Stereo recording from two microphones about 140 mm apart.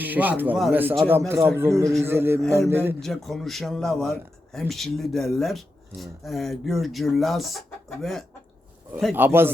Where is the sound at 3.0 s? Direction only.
Centre (ahead or behind).